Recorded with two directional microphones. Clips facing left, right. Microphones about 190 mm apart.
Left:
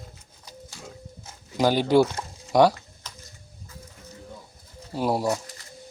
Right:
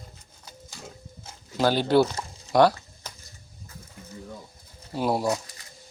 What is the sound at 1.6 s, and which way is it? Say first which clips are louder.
Speech: left 1 dB; 15° left (ahead or behind).